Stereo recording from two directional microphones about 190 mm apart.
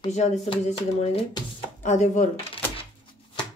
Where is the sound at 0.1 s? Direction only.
35° left (ahead or behind).